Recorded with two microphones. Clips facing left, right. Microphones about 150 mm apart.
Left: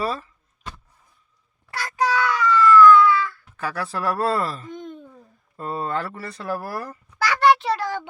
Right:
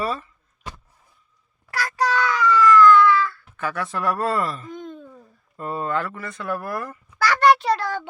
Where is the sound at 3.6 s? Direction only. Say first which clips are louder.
Right 1 dB; 35° left (ahead or behind).